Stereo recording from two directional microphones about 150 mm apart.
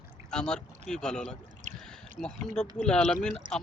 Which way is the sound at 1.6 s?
55° right (ahead or behind).